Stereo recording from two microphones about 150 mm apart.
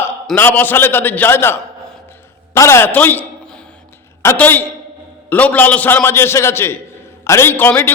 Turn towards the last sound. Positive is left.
turn(degrees=10)  # may be behind; listen again after turning